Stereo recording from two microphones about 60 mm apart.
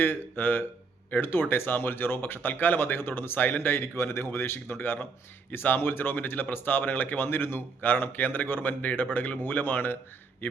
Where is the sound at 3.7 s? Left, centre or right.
Left.